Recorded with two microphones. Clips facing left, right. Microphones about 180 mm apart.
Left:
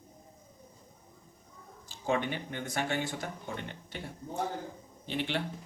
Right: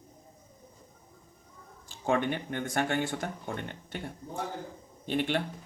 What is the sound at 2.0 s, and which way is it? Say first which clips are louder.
Speech: right 3 dB; 50° right (ahead or behind).